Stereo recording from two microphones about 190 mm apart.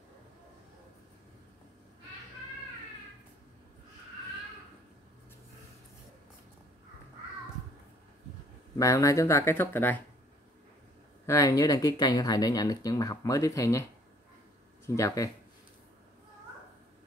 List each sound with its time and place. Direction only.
8.7 s speech: 15° left (ahead or behind)
11.2 s speech: 15° left (ahead or behind)
15.0 s speech: 15° left (ahead or behind)